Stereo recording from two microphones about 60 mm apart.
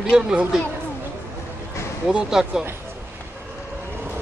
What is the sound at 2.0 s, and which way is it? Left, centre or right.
Speech, centre.